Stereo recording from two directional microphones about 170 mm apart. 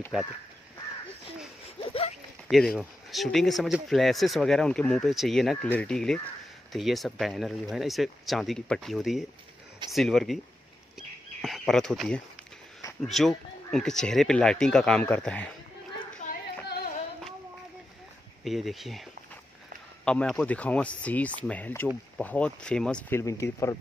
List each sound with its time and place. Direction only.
1.8 s a sound: 35° left (ahead or behind)
2.4 s speech: 5° left (ahead or behind)
11.0 s bird: centre (ahead or behind)
13.0 s speech: centre (ahead or behind)
16.6 s music: 70° left (ahead or behind)
18.4 s speech: centre (ahead or behind)
20.1 s speech: 5° left (ahead or behind)